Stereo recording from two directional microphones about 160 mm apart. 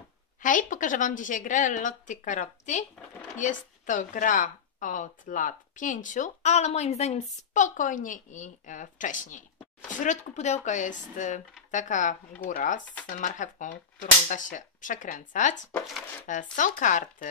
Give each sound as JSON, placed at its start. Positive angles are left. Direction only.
{"t": 0.4, "sound": "speech", "side_deg": 55}